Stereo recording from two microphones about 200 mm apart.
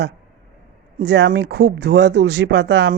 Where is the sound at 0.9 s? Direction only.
55° right (ahead or behind).